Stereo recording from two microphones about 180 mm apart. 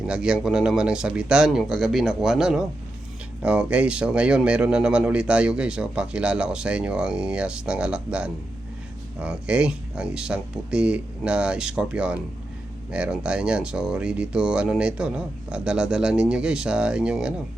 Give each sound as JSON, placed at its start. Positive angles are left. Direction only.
{"t": 0.1, "sound": "speech", "side_deg": -5}